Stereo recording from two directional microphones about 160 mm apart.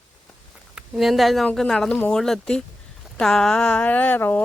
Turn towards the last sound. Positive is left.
turn(degrees=10)  # may be behind; listen again after turning